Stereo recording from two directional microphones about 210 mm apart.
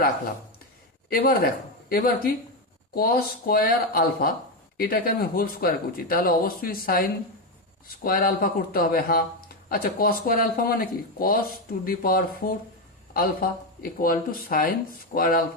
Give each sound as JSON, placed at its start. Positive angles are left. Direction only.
{"t": 1.1, "sound": "speech", "side_deg": 45}